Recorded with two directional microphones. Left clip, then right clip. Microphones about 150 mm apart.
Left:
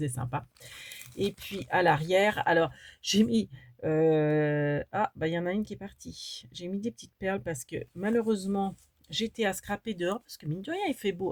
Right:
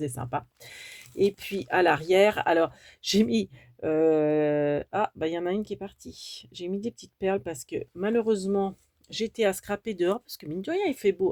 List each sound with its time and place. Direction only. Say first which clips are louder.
0.0 s speech: right 4 dB; 40° right (ahead or behind)